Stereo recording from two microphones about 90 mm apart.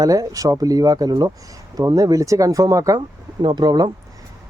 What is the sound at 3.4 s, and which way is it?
Speech, 55° right (ahead or behind).